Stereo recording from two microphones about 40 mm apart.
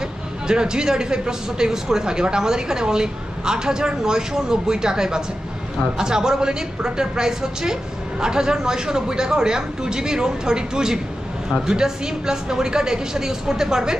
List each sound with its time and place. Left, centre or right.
0.5 s a woman's voice: centre